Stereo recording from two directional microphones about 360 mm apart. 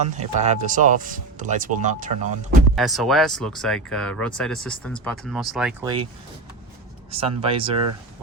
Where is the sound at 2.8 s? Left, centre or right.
Centre.